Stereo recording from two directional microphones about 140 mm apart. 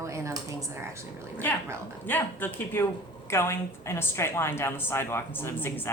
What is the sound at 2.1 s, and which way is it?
A woman's voice, 15° left (ahead or behind).